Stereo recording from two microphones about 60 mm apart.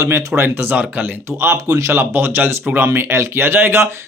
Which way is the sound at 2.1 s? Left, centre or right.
Right.